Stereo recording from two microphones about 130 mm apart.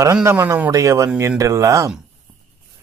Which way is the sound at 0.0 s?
20° right (ahead or behind).